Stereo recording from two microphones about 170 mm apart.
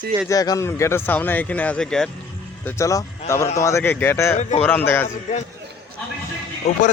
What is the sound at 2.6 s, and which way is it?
A man's voice, 20° left (ahead or behind).